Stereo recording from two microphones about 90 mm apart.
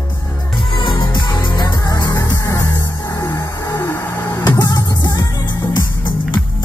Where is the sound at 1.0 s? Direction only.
50° left (ahead or behind).